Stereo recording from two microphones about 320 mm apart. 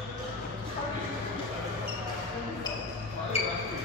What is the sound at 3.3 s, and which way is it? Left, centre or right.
Basketball bounce, centre.